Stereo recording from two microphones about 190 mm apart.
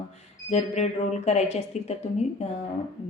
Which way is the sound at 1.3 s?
35° left (ahead or behind).